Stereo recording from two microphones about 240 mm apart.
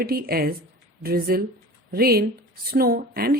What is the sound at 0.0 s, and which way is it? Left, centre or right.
A woman's voice, right.